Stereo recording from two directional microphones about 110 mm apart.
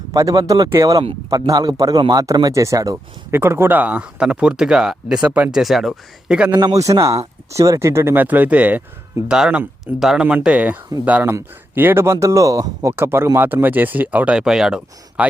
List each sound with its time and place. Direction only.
0.1 s speech: 30° right (ahead or behind); by 5.5 s 10° right (ahead or behind)
5.5 s speech: centre (ahead or behind)
6.6 s speech: 35° right (ahead or behind); by 15.3 s 10° right (ahead or behind)